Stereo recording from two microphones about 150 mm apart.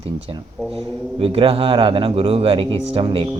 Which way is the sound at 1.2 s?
40° right (ahead or behind).